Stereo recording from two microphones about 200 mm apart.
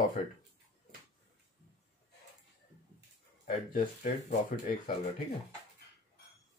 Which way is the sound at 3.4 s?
40° left (ahead or behind).